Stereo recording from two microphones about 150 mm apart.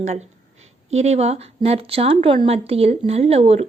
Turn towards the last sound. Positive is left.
turn(degrees=-40)  # may be behind; listen again after turning